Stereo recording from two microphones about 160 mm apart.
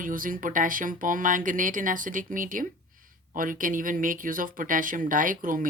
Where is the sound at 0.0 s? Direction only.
55° right (ahead or behind).